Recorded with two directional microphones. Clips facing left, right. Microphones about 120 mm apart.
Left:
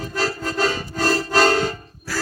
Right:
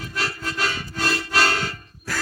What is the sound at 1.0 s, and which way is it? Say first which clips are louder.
Music: left 5 dB; 40° left (ahead or behind).